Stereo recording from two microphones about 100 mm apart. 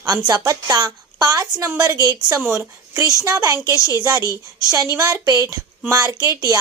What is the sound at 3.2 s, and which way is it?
Speech, 35° right (ahead or behind).